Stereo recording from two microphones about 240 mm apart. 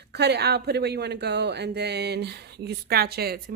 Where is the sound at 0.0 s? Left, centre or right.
Right.